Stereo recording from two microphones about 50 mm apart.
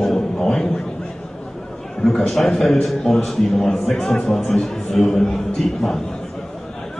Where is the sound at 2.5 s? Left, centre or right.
Centre.